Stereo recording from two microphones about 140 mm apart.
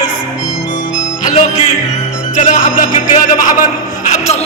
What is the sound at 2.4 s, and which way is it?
Music, 65° left (ahead or behind).